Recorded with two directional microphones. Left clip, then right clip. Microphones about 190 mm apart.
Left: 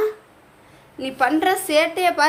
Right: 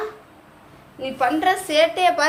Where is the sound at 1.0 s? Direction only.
20° left (ahead or behind).